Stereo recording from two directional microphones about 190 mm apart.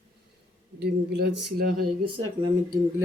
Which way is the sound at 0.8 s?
60° right (ahead or behind).